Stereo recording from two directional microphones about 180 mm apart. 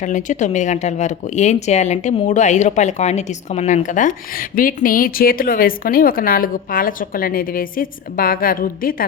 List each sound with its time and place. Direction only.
0.0 s speech: 45° left (ahead or behind)